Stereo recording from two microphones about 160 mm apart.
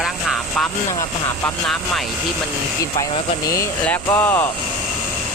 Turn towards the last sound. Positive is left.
turn(degrees=15)  # may be behind; listen again after turning